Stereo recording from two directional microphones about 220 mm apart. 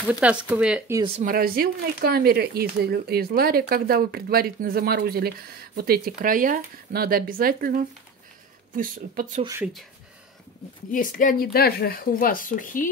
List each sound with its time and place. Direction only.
0.1 s speech: 5° right (ahead or behind)
1.0 s speech: 35° right (ahead or behind)
9.4 s speech: 15° right (ahead or behind)
10.9 s speech: 40° left (ahead or behind)